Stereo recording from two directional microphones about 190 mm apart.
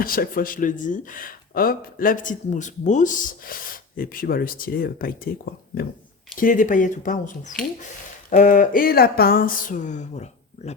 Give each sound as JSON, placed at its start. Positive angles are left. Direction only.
{"t": 0.0, "sound": "speech", "side_deg": 50}
{"t": 6.4, "sound": "speech", "side_deg": 45}